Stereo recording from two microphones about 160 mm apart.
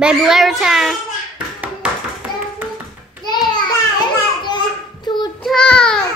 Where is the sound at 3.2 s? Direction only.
25° left (ahead or behind).